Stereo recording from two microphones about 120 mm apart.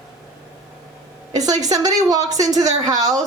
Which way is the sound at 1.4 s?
30° right (ahead or behind).